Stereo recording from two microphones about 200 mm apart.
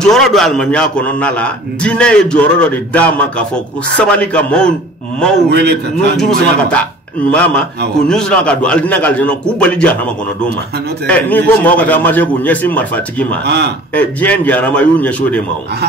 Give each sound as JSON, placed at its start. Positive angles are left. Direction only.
{"t": 0.0, "sound": "a man's voice", "side_deg": 0}
{"t": 5.5, "sound": "a man's voice", "side_deg": -55}
{"t": 6.1, "sound": "a man's voice", "side_deg": 0}
{"t": 11.1, "sound": "a man's voice", "side_deg": 10}
{"t": 13.5, "sound": "a man's voice", "side_deg": -55}
{"t": 13.9, "sound": "a man's voice", "side_deg": 10}